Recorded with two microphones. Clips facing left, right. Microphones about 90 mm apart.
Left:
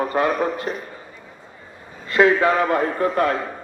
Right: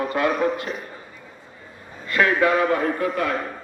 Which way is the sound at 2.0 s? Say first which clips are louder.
Left 3 dB; 25° left (ahead or behind).